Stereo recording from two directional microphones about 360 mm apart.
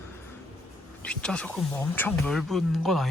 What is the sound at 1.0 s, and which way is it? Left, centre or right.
Speech, centre.